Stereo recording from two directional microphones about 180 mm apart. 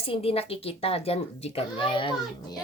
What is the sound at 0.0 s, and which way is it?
A child's voice, 30° left (ahead or behind).